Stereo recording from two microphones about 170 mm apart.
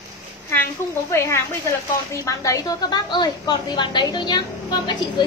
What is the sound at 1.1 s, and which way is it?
A woman's voice, 15° left (ahead or behind).